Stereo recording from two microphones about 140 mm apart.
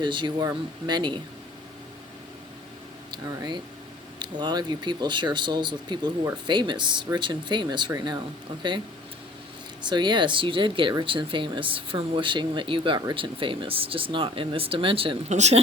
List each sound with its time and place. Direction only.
0.0 s speech: 35° right (ahead or behind)
3.1 s speech: 30° right (ahead or behind)
9.8 s speech: 35° right (ahead or behind)
15.3 s speech: 55° right (ahead or behind)